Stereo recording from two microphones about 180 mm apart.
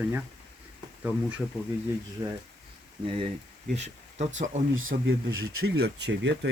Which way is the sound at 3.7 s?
40° right (ahead or behind).